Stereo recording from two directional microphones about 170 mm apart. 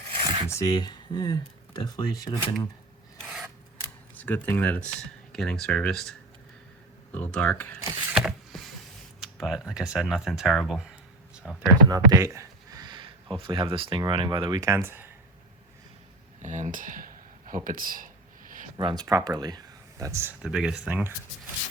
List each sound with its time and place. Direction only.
0.1 s filing: 30° right (ahead or behind)
0.5 s speech: 25° left (ahead or behind)
3.2 s filing: centre (ahead or behind)
4.2 s speech: 10° left (ahead or behind)
8.1 s a sound: centre (ahead or behind)
9.2 s speech: centre (ahead or behind)
11.9 s a sound: 20° right (ahead or behind)
13.3 s speech: 30° right (ahead or behind); by 15.1 s 10° right (ahead or behind)
16.4 s a sound: 45° right (ahead or behind)
18.8 s speech: 30° right (ahead or behind)
20.4 s speech: 5° right (ahead or behind)